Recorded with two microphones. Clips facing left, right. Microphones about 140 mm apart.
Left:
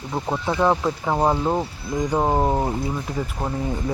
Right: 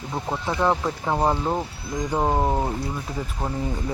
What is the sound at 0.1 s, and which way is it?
Speech, 15° left (ahead or behind).